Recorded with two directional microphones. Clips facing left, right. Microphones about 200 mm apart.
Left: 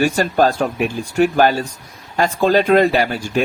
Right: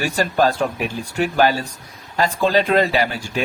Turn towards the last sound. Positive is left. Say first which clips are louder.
# left 3 dB
turn(degrees=50)  # may be behind; listen again after turning